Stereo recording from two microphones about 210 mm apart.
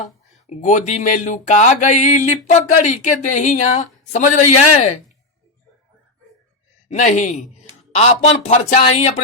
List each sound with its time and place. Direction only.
0.5 s speech: 35° left (ahead or behind)
6.8 s speech: 35° left (ahead or behind)